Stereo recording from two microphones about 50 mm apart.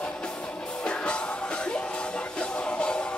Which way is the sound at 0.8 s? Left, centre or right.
Left.